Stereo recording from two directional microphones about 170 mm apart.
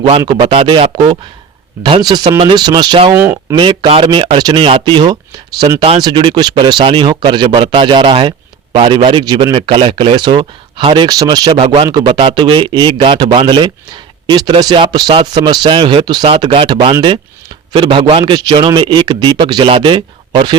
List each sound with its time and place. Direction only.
0.2 s speech: 20° right (ahead or behind)
0.4 s speech: 35° right (ahead or behind)
11.6 s speech: 35° right (ahead or behind)
11.9 s speech: 25° right (ahead or behind)